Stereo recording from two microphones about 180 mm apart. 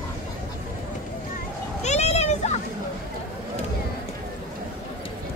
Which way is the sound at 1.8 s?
40° left (ahead or behind).